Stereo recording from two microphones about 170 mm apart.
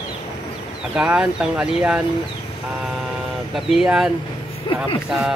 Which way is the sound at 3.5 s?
Centre (ahead or behind).